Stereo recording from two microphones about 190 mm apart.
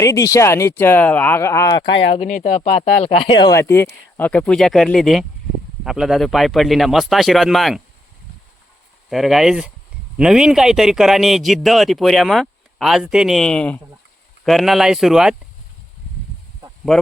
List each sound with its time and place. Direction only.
0.0 s speech: 15° left (ahead or behind)
2.1 s a man's voice: 40° left (ahead or behind); by 7.8 s centre (ahead or behind)
9.0 s a man's voice: centre (ahead or behind)
16.9 s speech: centre (ahead or behind)